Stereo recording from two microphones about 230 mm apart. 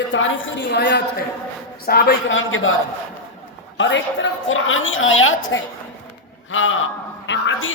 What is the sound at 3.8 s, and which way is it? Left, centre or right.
A woman's voice, left.